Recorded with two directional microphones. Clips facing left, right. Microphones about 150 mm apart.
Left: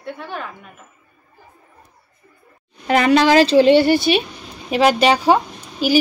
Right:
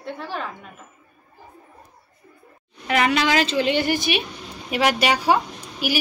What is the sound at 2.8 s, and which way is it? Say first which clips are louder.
A woman's voice: left 6 dB; 35° left (ahead or behind).